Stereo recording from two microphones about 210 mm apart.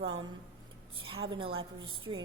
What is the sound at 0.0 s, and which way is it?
Speech, 25° right (ahead or behind).